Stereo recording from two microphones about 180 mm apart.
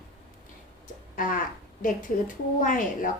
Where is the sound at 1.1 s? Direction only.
50° left (ahead or behind).